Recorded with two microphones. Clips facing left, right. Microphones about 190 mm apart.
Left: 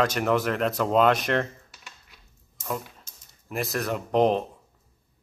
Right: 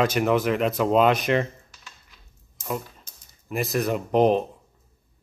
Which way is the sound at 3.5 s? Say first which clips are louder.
Right 4 dB; centre (ahead or behind).